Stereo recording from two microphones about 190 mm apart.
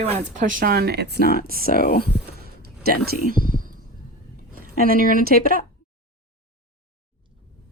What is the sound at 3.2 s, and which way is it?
Speech, 45° right (ahead or behind).